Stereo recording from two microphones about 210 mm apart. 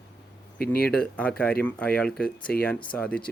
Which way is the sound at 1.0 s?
5° left (ahead or behind).